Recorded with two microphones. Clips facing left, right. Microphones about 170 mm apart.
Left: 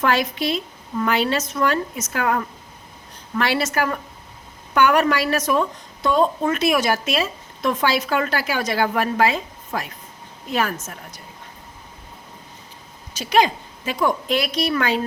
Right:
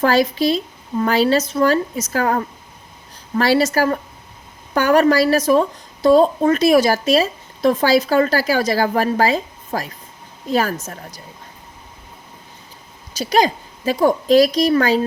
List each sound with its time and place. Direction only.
0.0 s a woman's voice: 35° right (ahead or behind)
13.1 s a woman's voice: 35° right (ahead or behind)